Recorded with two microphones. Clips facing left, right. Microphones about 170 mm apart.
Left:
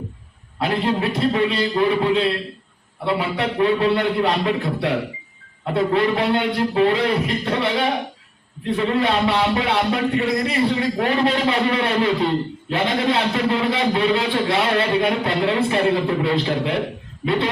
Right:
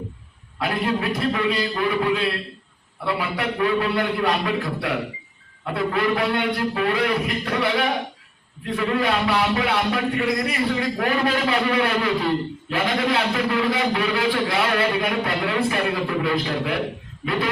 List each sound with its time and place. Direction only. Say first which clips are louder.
0.6 s a man's voice: left 3 dB; 25° left (ahead or behind)